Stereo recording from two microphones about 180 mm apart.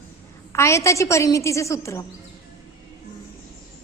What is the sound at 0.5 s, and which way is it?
A woman's voice, 15° left (ahead or behind).